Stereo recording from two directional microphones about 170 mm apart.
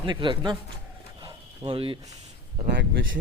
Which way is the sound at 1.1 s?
25° right (ahead or behind).